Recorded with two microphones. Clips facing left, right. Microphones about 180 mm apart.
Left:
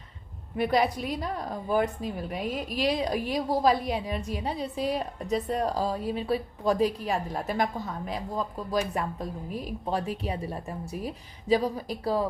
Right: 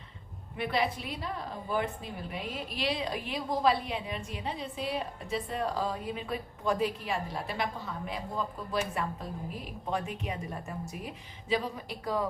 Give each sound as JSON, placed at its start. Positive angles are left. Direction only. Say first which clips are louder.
{"t": 0.5, "sound": "a woman's voice", "louder": "left 6 dB", "side_deg": 40}